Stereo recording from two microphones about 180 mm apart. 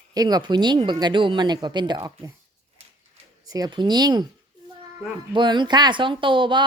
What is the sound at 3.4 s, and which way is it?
Speech, 20° right (ahead or behind).